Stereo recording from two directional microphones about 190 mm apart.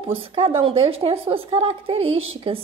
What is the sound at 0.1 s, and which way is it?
A woman's voice, 30° right (ahead or behind).